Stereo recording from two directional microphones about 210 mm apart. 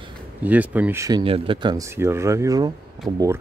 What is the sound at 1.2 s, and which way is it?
Speech, 25° right (ahead or behind).